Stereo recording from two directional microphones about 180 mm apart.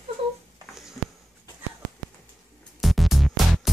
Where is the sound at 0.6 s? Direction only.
20° right (ahead or behind).